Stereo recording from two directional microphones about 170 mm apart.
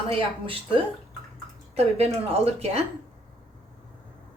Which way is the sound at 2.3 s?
35° right (ahead or behind).